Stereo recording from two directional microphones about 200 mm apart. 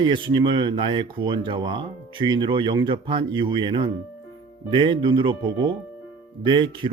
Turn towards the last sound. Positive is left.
turn(degrees=-25)  # may be behind; listen again after turning